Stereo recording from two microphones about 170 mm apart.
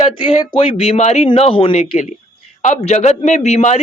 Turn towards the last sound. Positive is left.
turn(degrees=40)  # may be behind; listen again after turning